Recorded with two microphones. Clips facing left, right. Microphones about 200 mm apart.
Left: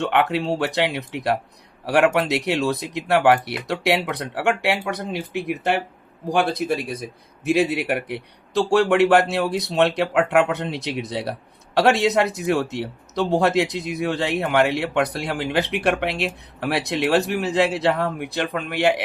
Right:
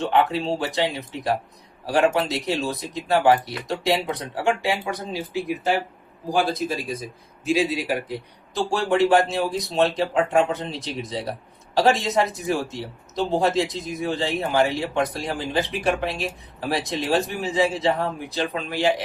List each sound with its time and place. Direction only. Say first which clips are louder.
0.0 s a man's voice: even; 70° left (ahead or behind)